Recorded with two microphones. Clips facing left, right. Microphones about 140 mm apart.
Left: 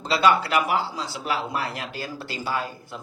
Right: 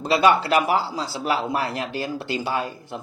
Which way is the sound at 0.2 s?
30° right (ahead or behind).